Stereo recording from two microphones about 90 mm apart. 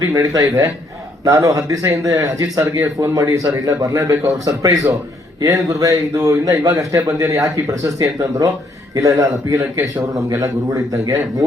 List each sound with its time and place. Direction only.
0.0 s a man's voice: 40° right (ahead or behind)